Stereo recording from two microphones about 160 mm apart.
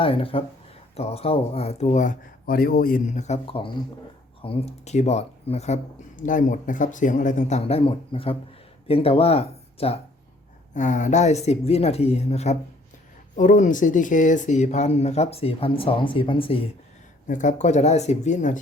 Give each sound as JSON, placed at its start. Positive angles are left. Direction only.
{"t": 0.0, "sound": "speech", "side_deg": 35}
{"t": 2.5, "sound": "speech", "side_deg": 70}
{"t": 10.8, "sound": "speech", "side_deg": 50}
{"t": 17.2, "sound": "speech", "side_deg": 50}